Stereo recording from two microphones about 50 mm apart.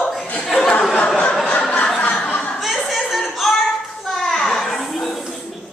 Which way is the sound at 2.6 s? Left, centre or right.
Centre.